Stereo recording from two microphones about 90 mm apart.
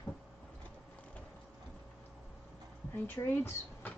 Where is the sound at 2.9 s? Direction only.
25° left (ahead or behind).